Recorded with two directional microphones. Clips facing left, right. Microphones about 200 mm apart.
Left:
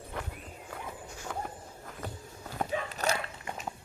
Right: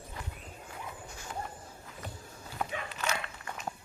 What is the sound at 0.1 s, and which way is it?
Horse, 60° left (ahead or behind).